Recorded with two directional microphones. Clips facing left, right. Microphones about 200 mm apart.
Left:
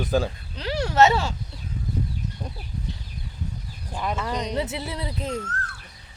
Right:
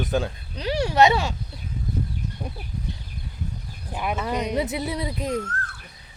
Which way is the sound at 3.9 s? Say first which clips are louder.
Right 1 dB; 15° right (ahead or behind).